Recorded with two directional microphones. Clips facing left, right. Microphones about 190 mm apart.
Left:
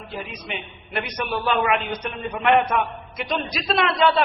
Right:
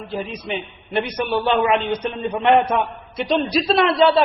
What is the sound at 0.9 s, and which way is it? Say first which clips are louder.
A man's voice: right 6 dB; 30° right (ahead or behind).